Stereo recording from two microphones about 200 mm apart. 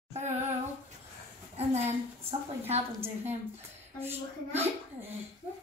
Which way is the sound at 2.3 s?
30° right (ahead or behind).